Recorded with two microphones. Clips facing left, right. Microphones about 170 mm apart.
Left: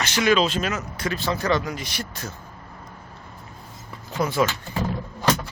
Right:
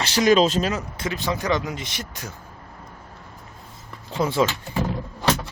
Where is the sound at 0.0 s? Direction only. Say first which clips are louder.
Right 3 dB; 35° right (ahead or behind); by 2.3 s 20° right (ahead or behind).